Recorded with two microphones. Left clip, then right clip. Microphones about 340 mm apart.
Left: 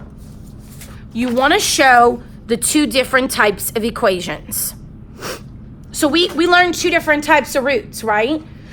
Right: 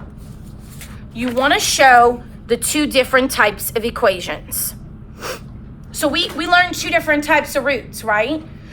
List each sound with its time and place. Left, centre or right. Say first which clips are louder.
1.1 s a woman's voice: left 2 dB; left
5.2 s a sound: even; left
5.9 s a woman's voice: left 3 dB; left